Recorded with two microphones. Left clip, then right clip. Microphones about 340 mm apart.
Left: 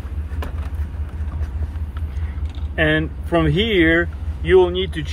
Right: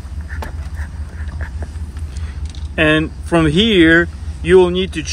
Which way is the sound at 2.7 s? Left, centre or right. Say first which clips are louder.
Right 4 dB; right.